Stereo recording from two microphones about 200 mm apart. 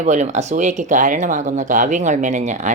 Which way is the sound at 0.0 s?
35° right (ahead or behind).